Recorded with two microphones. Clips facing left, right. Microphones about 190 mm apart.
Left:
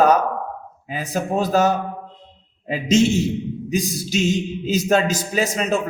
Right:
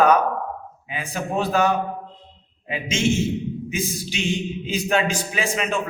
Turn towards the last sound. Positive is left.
turn(degrees=40)  # may be behind; listen again after turning